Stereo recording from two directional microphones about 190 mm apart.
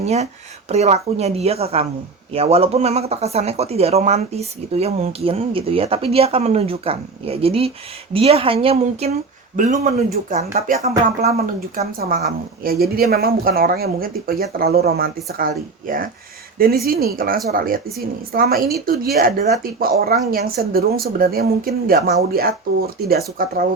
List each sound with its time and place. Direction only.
0.0 s speech: 35° right (ahead or behind)
11.2 s a woman's voice: 55° right (ahead or behind)